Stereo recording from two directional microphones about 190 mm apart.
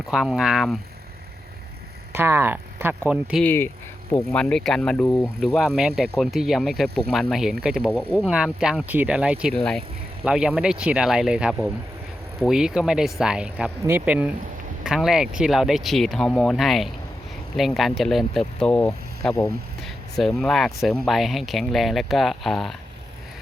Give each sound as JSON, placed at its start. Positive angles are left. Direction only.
{"t": 0.0, "sound": "speech", "side_deg": 0}
{"t": 2.1, "sound": "speech", "side_deg": -10}
{"t": 3.4, "sound": "speech", "side_deg": 10}
{"t": 19.3, "sound": "speech", "side_deg": 20}
{"t": 19.8, "sound": "speech", "side_deg": 0}